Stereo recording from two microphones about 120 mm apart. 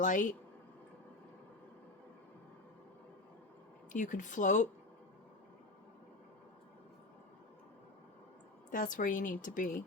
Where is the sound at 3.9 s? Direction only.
90° left.